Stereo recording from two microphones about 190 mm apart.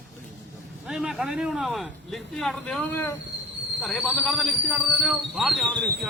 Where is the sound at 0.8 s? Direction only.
5° right (ahead or behind).